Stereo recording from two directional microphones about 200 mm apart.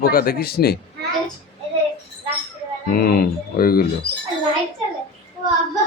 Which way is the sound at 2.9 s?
50° left (ahead or behind).